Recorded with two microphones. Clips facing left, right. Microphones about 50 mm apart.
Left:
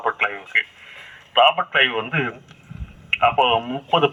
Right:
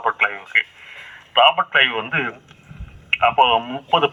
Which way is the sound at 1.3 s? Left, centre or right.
Right.